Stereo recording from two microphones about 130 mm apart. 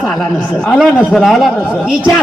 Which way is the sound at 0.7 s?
Centre (ahead or behind).